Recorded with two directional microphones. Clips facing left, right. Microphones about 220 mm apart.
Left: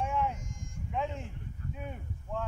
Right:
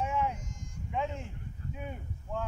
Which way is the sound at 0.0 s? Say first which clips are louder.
Even; centre (ahead or behind).